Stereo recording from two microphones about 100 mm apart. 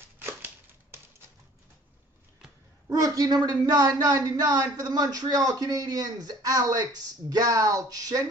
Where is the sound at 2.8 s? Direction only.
35° right (ahead or behind).